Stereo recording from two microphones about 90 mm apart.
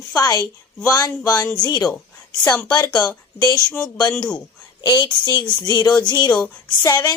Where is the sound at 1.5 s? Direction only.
50° left (ahead or behind).